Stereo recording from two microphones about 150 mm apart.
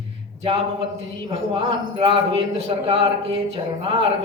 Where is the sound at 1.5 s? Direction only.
35° right (ahead or behind).